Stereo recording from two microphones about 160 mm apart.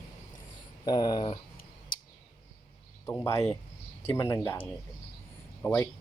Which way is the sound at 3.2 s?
15° left (ahead or behind).